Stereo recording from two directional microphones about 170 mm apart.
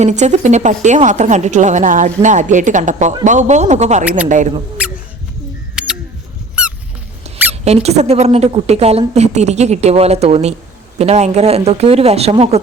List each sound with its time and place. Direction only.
0.0 s speech: 45° right (ahead or behind)
4.8 s rodents: 5° right (ahead or behind)
5.8 s camera: 5° right (ahead or behind)
7.3 s speech: 40° right (ahead or behind)